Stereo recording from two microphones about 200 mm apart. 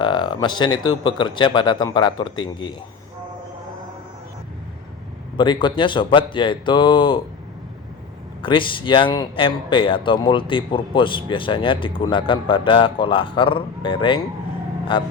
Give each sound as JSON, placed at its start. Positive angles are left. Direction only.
{"t": 0.0, "sound": "speech", "side_deg": 25}
{"t": 5.4, "sound": "speech", "side_deg": 25}
{"t": 8.4, "sound": "speech", "side_deg": 25}